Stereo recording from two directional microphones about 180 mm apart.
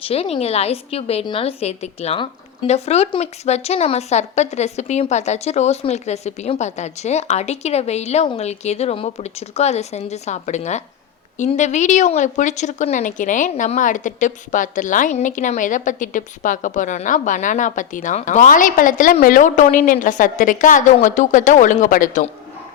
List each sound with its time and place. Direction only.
0.0 s speech: 35° left (ahead or behind)